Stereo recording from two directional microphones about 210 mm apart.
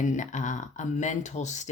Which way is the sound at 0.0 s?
35° left (ahead or behind).